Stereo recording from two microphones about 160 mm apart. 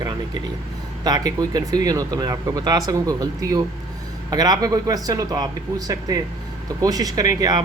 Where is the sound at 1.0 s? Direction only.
25° right (ahead or behind).